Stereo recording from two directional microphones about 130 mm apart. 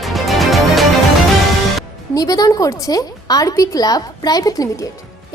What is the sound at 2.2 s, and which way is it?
A woman's voice, 25° left (ahead or behind).